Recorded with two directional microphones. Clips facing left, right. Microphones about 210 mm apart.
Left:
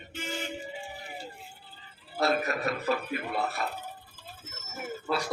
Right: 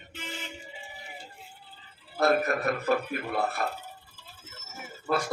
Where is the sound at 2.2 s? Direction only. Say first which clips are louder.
Right 3 dB; 50° right (ahead or behind).